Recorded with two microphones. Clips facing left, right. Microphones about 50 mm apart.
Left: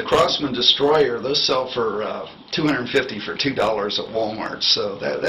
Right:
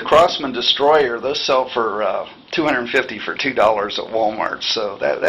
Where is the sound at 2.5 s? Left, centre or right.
Right.